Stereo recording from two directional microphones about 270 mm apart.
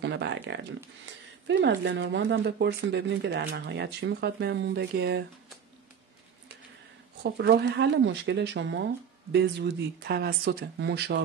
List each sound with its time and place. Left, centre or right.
0.0 s speech: right
7.2 s speech: right